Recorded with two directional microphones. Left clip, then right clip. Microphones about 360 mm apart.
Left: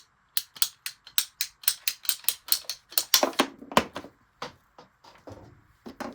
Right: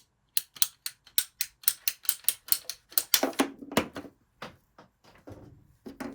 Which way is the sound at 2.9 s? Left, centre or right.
Centre.